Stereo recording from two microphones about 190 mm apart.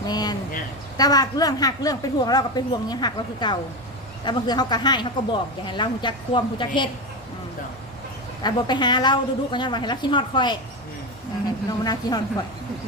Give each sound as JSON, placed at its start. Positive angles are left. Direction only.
{"t": 0.0, "sound": "a sound", "side_deg": 20}
{"t": 0.9, "sound": "speech", "side_deg": 20}
{"t": 8.4, "sound": "speech", "side_deg": 20}
{"t": 11.8, "sound": "speech", "side_deg": 20}